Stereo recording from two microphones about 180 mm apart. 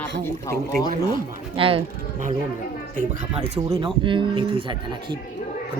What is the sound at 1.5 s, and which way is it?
Speech, 30° right (ahead or behind).